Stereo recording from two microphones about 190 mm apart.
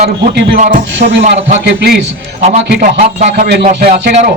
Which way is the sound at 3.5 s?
60° right (ahead or behind).